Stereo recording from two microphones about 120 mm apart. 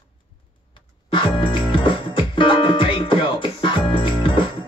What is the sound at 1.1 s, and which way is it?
Music, 45° left (ahead or behind).